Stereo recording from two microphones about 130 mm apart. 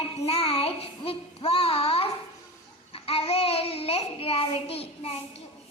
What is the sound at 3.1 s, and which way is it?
Child singing, 50° left (ahead or behind).